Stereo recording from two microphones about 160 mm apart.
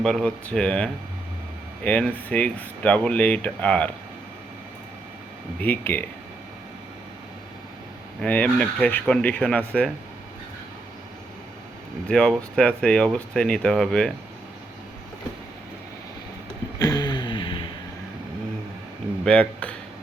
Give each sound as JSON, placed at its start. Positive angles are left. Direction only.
{"t": 0.0, "sound": "speech", "side_deg": 5}
{"t": 5.5, "sound": "speech", "side_deg": 10}
{"t": 8.2, "sound": "speech", "side_deg": 5}
{"t": 12.0, "sound": "speech", "side_deg": 5}
{"t": 16.7, "sound": "a sound", "side_deg": 25}
{"t": 19.2, "sound": "speech", "side_deg": 5}